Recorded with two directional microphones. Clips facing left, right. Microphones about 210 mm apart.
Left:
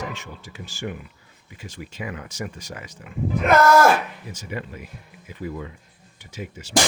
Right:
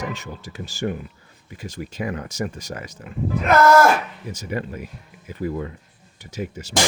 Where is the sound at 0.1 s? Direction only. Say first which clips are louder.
Right 4 dB; 40° right (ahead or behind).